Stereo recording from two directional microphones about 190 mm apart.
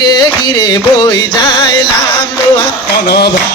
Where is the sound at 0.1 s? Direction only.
20° left (ahead or behind).